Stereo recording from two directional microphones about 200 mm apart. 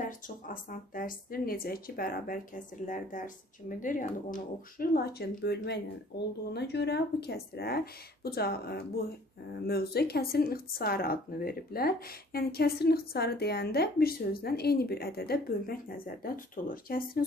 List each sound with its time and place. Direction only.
0.5 s speech: 45° left (ahead or behind)